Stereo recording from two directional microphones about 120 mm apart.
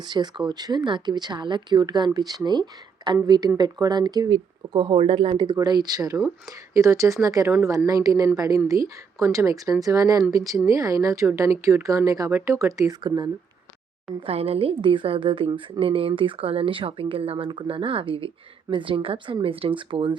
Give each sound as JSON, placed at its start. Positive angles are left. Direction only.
{"t": 0.0, "sound": "a woman's voice", "side_deg": -35}
{"t": 13.0, "sound": "speech", "side_deg": -40}
{"t": 14.2, "sound": "speech", "side_deg": -55}